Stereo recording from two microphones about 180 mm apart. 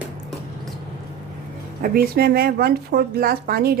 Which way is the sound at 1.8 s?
55° right (ahead or behind).